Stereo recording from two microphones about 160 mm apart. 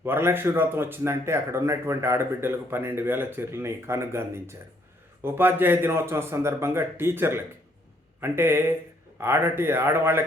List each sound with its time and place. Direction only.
0.0 s speech: 15° right (ahead or behind)